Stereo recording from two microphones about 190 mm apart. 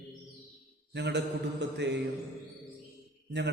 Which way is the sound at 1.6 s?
65° right (ahead or behind).